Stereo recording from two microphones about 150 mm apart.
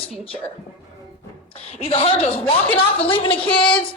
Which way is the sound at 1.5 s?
40° left (ahead or behind).